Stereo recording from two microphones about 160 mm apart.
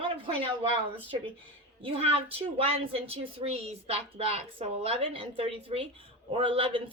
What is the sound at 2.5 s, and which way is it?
Speech, 35° right (ahead or behind).